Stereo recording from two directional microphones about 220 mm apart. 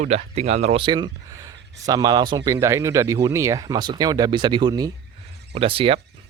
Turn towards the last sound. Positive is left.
turn(degrees=-25)  # may be behind; listen again after turning